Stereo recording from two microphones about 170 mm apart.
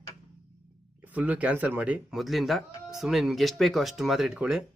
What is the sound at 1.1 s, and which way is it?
Speech, 10° right (ahead or behind).